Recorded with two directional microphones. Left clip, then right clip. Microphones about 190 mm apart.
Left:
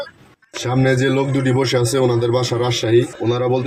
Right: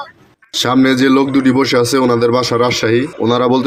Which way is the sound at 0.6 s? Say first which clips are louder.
Right 6 dB; 40° right (ahead or behind).